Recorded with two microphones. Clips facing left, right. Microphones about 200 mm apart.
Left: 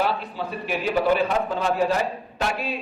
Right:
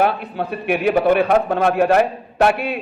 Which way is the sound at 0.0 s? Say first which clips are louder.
Right 6 dB; 55° right (ahead or behind).